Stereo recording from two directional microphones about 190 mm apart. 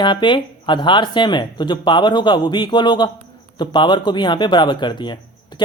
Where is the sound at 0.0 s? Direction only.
25° left (ahead or behind).